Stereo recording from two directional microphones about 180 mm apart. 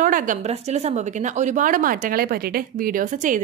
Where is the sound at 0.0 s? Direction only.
50° right (ahead or behind).